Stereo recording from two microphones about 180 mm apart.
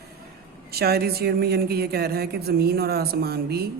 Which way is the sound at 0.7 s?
60° right (ahead or behind).